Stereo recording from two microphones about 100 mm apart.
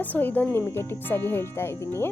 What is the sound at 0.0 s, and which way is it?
Speech, 15° left (ahead or behind).